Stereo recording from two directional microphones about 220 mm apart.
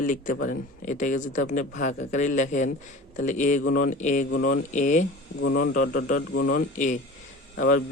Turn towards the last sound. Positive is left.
turn(degrees=40)  # may be behind; listen again after turning